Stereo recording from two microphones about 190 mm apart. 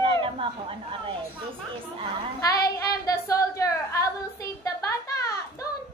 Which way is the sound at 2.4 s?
20° left (ahead or behind).